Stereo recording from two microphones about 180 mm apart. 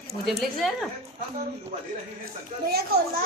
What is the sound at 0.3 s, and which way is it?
Speech, centre (ahead or behind).